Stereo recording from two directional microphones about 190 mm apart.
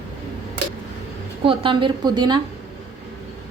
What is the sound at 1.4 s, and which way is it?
Speech, 25° right (ahead or behind).